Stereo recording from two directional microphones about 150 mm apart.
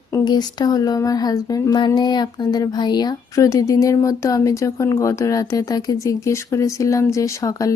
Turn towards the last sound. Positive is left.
turn(degrees=20)  # may be behind; listen again after turning